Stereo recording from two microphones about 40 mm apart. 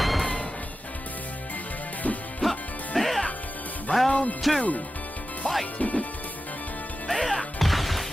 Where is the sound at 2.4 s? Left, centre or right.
Centre.